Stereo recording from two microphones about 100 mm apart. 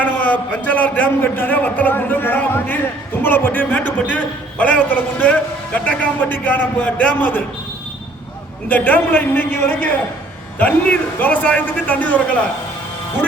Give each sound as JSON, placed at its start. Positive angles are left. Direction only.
{"t": 0.0, "sound": "a man's voice", "side_deg": 15}
{"t": 8.7, "sound": "a man's voice", "side_deg": 15}